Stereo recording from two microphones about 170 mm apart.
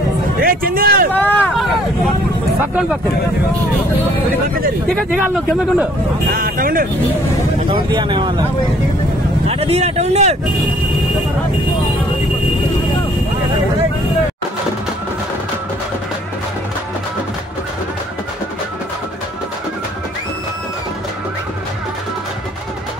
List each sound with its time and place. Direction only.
0.4 s speech: 60° right (ahead or behind)
1.1 s vehicle: 10° left (ahead or behind)
2.7 s speech: 5° right (ahead or behind)
4.8 s speech: centre (ahead or behind)
6.3 s speech: 55° right (ahead or behind)
7.7 s speech: 30° right (ahead or behind)
9.5 s speech: 35° right (ahead or behind)